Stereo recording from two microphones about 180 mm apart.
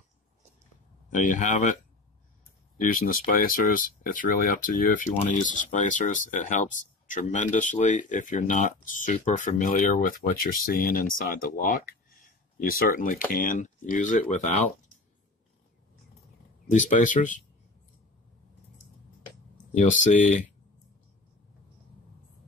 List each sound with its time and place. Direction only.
1.1 s speech: 45° left (ahead or behind)
2.8 s speech: 50° left (ahead or behind)
16.6 s speech: 45° left (ahead or behind)
19.5 s speech: 45° left (ahead or behind)